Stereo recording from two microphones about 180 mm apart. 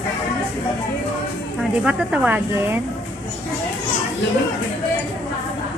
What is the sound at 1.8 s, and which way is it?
Speech, 5° right (ahead or behind).